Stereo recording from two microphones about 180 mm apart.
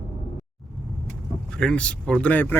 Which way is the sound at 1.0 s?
5° left (ahead or behind).